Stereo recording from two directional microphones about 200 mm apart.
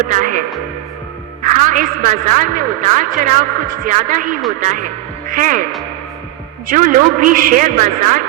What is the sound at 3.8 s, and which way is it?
Speech, 40° right (ahead or behind).